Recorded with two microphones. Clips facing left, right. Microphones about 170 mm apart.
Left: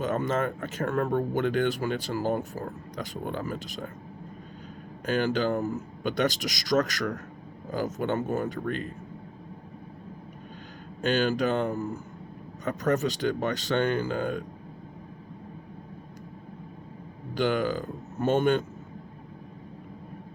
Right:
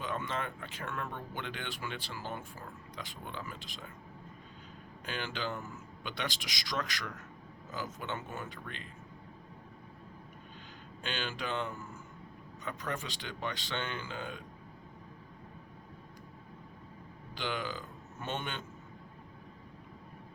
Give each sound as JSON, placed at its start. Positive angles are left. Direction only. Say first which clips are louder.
{"t": 0.0, "sound": "speech", "louder": "left 10 dB", "side_deg": 45}
{"t": 5.0, "sound": "speech", "louder": "left 13 dB", "side_deg": 45}
{"t": 11.0, "sound": "speech", "louder": "left 14 dB", "side_deg": 45}
{"t": 17.3, "sound": "a man's voice", "louder": "left 12 dB", "side_deg": 45}